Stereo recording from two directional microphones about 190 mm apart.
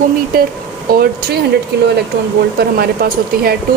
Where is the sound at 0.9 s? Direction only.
55° right (ahead or behind).